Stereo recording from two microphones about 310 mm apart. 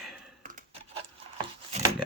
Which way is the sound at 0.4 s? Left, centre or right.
Right.